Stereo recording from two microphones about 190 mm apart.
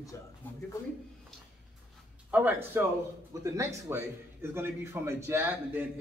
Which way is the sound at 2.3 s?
10° right (ahead or behind).